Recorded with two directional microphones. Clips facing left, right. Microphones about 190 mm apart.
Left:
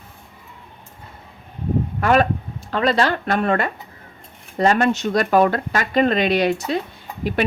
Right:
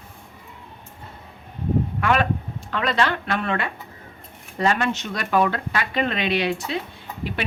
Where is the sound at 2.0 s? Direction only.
40° left (ahead or behind).